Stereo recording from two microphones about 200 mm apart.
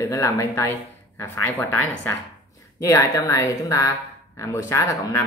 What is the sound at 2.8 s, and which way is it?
A woman's voice, 15° left (ahead or behind).